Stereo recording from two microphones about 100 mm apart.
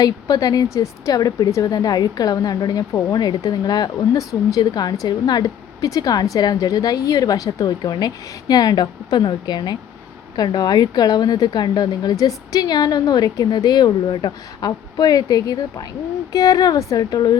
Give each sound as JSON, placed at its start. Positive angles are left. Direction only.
{"t": 0.0, "sound": "a woman's voice", "side_deg": 40}